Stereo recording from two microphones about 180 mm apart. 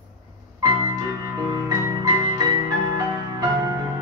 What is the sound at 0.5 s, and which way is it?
Music, 15° right (ahead or behind).